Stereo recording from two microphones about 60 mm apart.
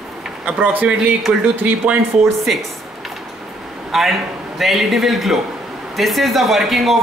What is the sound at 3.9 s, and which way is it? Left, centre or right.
A man's voice, centre.